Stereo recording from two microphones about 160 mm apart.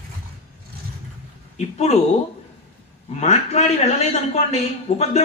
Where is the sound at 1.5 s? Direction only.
40° left (ahead or behind).